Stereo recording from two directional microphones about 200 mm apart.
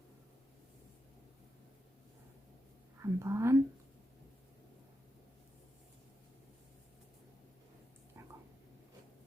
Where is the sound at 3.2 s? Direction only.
15° right (ahead or behind).